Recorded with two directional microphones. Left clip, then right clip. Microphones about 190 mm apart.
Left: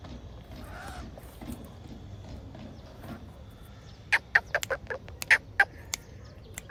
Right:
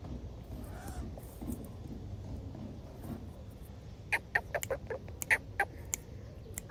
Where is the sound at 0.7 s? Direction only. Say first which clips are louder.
Left 8 dB; 30° right (ahead or behind).